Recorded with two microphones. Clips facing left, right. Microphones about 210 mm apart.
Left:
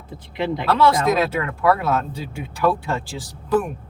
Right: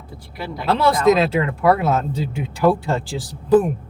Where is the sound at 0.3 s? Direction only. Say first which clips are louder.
Left 7 dB; 20° left (ahead or behind).